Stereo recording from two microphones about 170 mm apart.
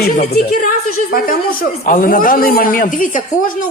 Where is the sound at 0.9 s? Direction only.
55° left (ahead or behind).